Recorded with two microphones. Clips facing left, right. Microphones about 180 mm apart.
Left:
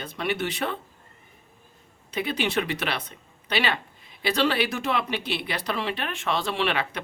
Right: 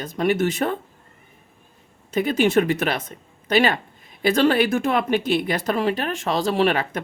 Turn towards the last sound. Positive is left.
turn(degrees=-45)  # may be behind; listen again after turning